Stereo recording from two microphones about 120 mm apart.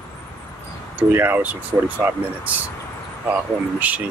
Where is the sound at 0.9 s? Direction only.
15° right (ahead or behind).